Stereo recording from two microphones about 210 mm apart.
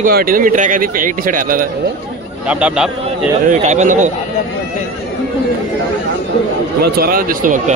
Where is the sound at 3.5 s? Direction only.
35° right (ahead or behind).